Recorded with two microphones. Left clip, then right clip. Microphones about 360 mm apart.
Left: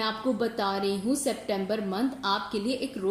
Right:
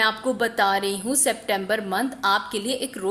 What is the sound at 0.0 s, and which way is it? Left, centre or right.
Speech, right.